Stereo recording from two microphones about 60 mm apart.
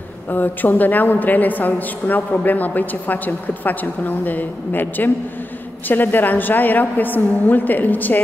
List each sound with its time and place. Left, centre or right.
0.3 s a woman's voice: left